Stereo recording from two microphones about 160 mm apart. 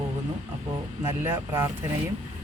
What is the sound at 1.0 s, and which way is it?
Speech, 15° right (ahead or behind).